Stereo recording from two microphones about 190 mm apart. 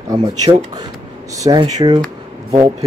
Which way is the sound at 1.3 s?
20° right (ahead or behind).